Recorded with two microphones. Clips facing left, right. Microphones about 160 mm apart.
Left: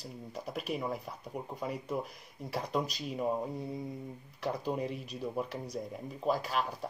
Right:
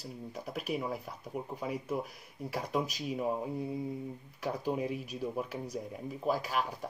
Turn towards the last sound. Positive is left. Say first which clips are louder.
# even
turn(degrees=-5)  # may be behind; listen again after turning